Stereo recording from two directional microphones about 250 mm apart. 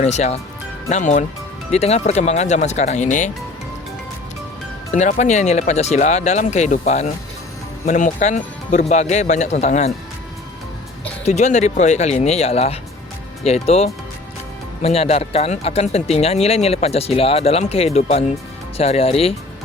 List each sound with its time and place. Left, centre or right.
0.0 s speech: left
4.9 s speech: left
11.3 s speech: left